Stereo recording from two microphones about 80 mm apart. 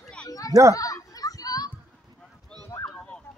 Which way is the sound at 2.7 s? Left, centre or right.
Left.